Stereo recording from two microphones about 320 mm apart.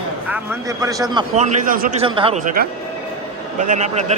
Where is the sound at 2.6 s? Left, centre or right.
Right.